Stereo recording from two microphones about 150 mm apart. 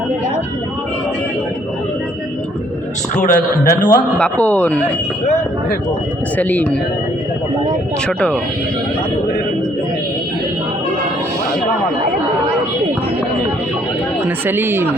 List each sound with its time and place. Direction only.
3.2 s a man's voice: 60° left (ahead or behind)
3.8 s a man's voice: 10° left (ahead or behind)
6.3 s a man's voice: 10° left (ahead or behind)
8.0 s a man's voice: 5° left (ahead or behind)
14.3 s speech: 15° right (ahead or behind)